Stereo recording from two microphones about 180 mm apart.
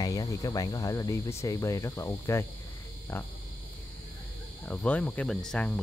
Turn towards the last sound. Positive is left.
turn(degrees=5)  # may be behind; listen again after turning